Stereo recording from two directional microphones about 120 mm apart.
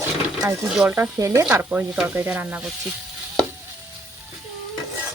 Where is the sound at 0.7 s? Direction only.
10° right (ahead or behind).